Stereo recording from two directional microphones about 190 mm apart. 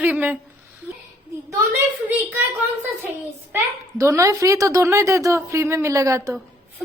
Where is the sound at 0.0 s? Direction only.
10° right (ahead or behind).